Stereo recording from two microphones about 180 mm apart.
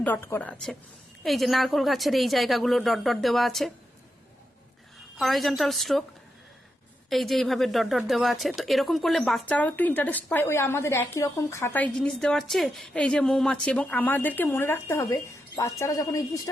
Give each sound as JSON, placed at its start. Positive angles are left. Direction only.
{"t": 0.0, "sound": "a woman's voice", "side_deg": 10}
{"t": 5.1, "sound": "a woman's voice", "side_deg": 0}
{"t": 7.1, "sound": "a woman's voice", "side_deg": 0}